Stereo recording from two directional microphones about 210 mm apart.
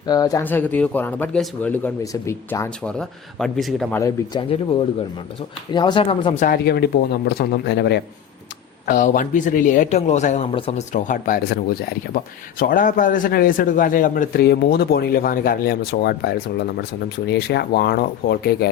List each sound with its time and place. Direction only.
0.0 s speech: 20° left (ahead or behind); by 3.8 s centre (ahead or behind)
3.9 s speech: 15° left (ahead or behind)
5.7 s speech: 20° left (ahead or behind)
6.4 s a man's voice: 45° left (ahead or behind)
8.9 s a man's voice: 40° left (ahead or behind)